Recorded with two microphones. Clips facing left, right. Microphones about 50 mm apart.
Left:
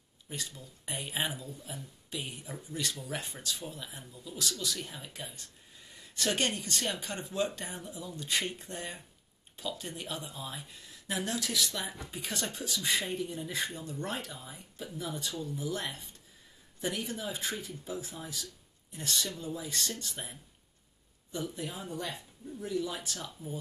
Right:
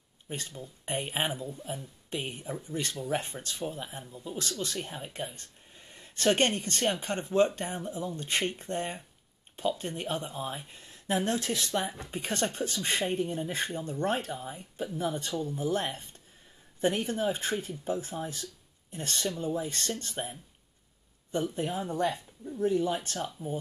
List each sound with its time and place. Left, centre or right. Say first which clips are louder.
0.3 s speech: right 3 dB; right
21.5 s speech: right 8 dB; right